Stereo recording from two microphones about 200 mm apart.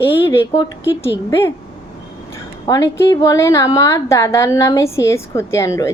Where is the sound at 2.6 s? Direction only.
15° left (ahead or behind).